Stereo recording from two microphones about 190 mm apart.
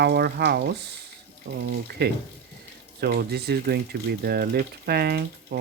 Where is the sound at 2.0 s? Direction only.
55° right (ahead or behind).